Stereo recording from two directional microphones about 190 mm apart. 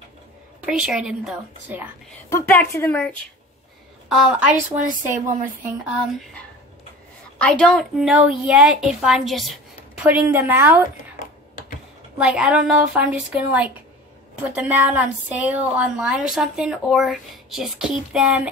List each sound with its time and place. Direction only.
0.7 s speech: 5° right (ahead or behind)
2.2 s a woman's voice: 15° left (ahead or behind)
4.1 s speech: 5° right (ahead or behind)
5.3 s speech: 40° right (ahead or behind)
7.3 s speech: 5° left (ahead or behind); by 10.9 s 10° right (ahead or behind)
12.2 s speech: 5° right (ahead or behind)